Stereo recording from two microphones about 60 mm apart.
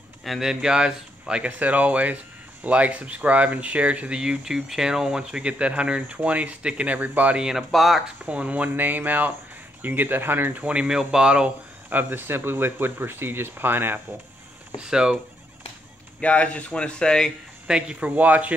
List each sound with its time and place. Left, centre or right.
0.2 s speech: centre; by 7.3 s right
7.3 s speech: centre
8.3 s speech: right
10.6 s speech: centre
11.9 s speech: right
14.8 s speech: centre
16.2 s speech: left
17.6 s speech: centre
18.0 s speech: right